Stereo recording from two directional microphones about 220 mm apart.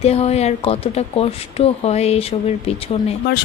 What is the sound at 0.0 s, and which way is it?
Speech, 30° left (ahead or behind).